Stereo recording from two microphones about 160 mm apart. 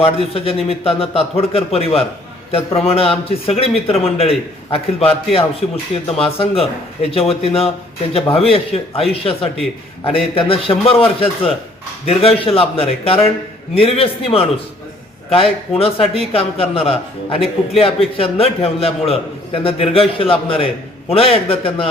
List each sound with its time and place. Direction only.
0.0 s a man's voice: 35° left (ahead or behind)